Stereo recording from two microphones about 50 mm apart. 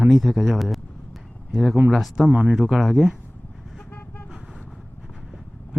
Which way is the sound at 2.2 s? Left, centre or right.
Right.